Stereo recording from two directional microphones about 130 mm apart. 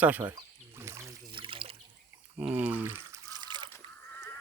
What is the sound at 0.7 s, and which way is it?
Trickle, 20° right (ahead or behind).